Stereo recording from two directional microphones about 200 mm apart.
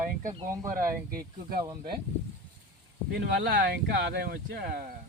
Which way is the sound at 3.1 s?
55° right (ahead or behind).